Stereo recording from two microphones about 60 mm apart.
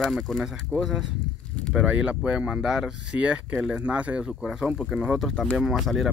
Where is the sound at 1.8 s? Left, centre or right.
Centre.